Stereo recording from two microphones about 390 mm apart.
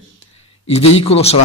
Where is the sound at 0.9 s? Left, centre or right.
Centre.